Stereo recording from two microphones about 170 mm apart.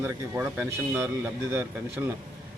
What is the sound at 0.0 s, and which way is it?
A man's voice, 10° right (ahead or behind).